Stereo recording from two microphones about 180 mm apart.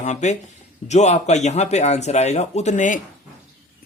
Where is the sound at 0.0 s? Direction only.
40° left (ahead or behind).